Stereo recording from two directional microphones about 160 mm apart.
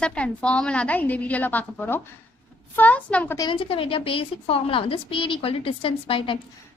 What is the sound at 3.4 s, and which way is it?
A woman's voice, 30° left (ahead or behind).